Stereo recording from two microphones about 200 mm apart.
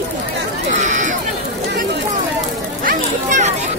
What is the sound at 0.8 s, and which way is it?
Chatter, 35° right (ahead or behind).